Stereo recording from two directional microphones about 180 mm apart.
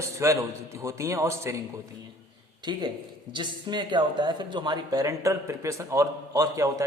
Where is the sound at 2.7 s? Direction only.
25° right (ahead or behind).